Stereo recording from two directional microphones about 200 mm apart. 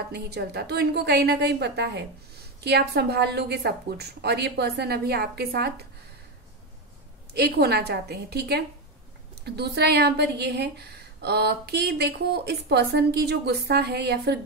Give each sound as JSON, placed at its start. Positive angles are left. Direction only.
{"t": 0.1, "sound": "a woman's voice", "side_deg": -55}
{"t": 7.3, "sound": "a woman's voice", "side_deg": -55}